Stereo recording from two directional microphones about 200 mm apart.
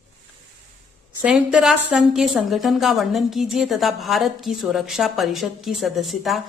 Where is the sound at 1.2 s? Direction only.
5° right (ahead or behind).